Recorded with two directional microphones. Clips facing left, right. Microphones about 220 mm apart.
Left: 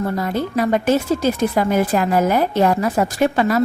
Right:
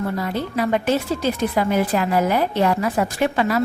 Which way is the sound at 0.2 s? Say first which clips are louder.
Left 3 dB; 45° left (ahead or behind).